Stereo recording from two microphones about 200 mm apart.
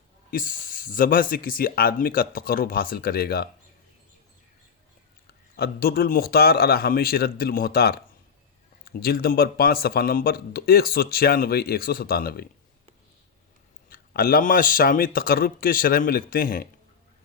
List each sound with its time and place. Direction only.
0.3 s speech: 45° left (ahead or behind)
5.5 s speech: 50° left (ahead or behind)
13.9 s speech: 45° left (ahead or behind)